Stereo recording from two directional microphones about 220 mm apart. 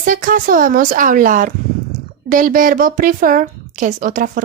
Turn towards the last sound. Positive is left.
turn(degrees=-40)  # may be behind; listen again after turning